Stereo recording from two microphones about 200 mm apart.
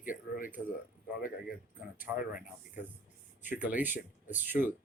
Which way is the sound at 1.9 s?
10° right (ahead or behind).